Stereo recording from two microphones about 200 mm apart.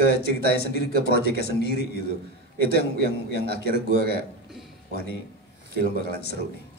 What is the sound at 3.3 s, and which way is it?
Speech, 55° left (ahead or behind).